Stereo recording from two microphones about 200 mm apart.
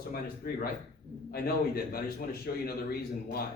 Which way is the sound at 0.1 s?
50° left (ahead or behind).